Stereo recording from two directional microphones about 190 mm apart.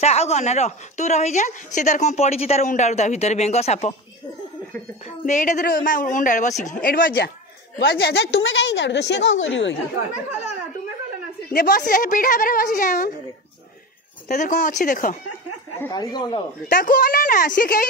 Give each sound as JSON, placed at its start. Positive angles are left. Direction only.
{"t": 0.0, "sound": "a woman's voice", "side_deg": 35}
{"t": 5.0, "sound": "a woman's voice", "side_deg": 40}
{"t": 11.5, "sound": "a woman's voice", "side_deg": 50}
{"t": 14.2, "sound": "a woman's voice", "side_deg": 40}
{"t": 15.9, "sound": "speech", "side_deg": 20}
{"t": 16.6, "sound": "a woman's voice", "side_deg": 45}